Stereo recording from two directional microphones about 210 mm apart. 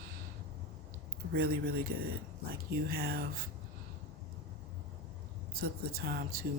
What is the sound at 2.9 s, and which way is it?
Speech, 45° right (ahead or behind).